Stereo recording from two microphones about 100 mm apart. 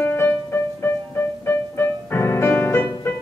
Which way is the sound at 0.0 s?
25° left (ahead or behind).